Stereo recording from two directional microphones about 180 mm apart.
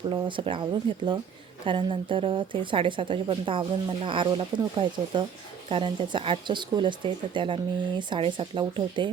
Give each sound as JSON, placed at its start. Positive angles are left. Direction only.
{"t": 0.1, "sound": "speech", "side_deg": -25}